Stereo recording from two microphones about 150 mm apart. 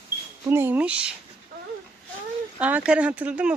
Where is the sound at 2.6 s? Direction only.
10° right (ahead or behind).